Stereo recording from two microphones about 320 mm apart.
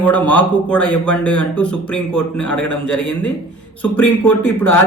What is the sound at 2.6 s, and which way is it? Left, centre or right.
Speech, left.